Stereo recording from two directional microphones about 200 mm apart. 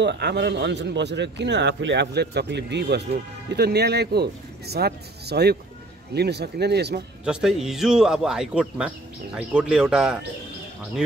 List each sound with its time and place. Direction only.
0.0 s a man's voice: 60° right (ahead or behind)
7.2 s speech: 5° right (ahead or behind)